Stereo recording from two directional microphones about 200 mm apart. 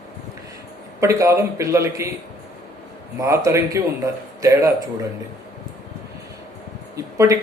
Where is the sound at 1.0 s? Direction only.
15° right (ahead or behind).